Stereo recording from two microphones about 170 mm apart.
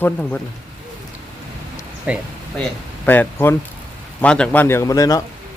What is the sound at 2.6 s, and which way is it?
Speech, 10° left (ahead or behind).